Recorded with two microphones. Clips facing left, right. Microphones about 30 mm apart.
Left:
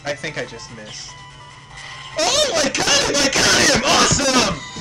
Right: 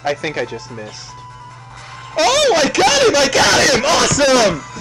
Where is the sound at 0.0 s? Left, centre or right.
Centre.